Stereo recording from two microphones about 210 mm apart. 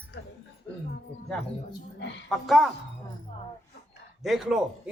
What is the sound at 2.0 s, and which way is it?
Speech, 55° left (ahead or behind).